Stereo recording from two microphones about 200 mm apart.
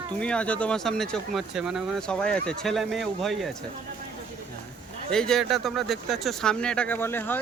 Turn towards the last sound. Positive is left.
turn(degrees=10)  # may be behind; listen again after turning